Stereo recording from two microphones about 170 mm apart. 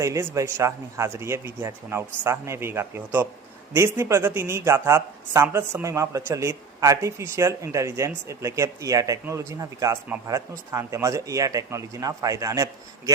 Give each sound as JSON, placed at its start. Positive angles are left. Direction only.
{"t": 0.0, "sound": "speech", "side_deg": -20}